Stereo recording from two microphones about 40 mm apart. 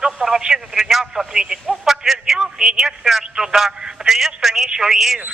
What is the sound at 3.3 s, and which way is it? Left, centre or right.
Speech, centre.